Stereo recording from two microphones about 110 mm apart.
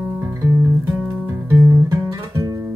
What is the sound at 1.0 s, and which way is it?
Guitar, 25° right (ahead or behind).